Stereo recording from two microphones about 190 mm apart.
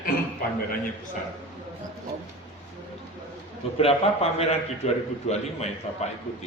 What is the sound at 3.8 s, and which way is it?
Speech, 30° left (ahead or behind).